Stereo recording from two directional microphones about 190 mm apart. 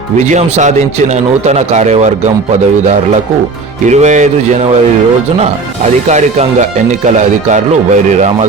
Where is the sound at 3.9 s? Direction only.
40° right (ahead or behind).